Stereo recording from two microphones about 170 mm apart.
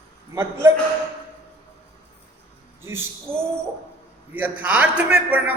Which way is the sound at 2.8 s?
15° right (ahead or behind).